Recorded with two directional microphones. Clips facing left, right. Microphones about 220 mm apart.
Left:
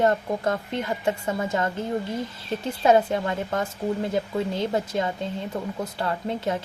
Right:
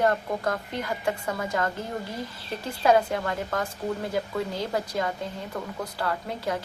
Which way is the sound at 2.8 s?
25° left (ahead or behind).